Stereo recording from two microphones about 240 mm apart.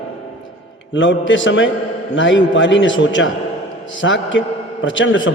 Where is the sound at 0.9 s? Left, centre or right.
Left.